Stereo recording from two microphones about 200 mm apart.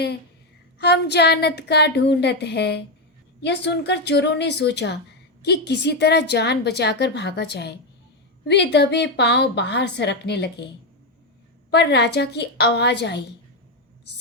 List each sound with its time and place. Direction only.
0.8 s a woman's voice: 55° left (ahead or behind)
11.7 s a woman's voice: 55° left (ahead or behind)